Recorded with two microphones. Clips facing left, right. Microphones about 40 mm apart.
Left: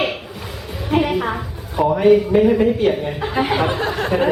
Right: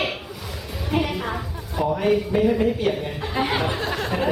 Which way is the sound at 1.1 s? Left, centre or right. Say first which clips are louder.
Left 7 dB; left.